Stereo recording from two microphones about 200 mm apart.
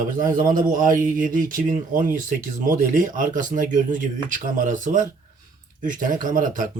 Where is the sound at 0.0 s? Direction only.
45° right (ahead or behind).